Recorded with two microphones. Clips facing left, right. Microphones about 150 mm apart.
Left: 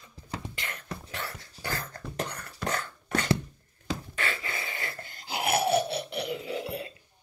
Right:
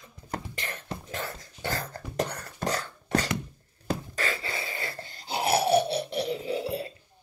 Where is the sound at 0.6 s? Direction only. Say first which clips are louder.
Right 2 dB; 30° right (ahead or behind).